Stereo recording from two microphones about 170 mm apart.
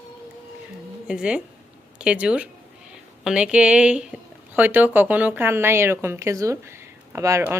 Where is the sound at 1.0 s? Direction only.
5° right (ahead or behind).